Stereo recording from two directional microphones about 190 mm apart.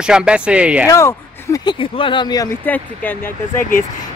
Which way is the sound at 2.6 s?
10° left (ahead or behind).